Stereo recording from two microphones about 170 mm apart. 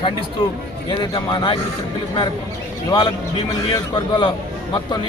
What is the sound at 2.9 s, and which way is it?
A man's voice, 25° left (ahead or behind).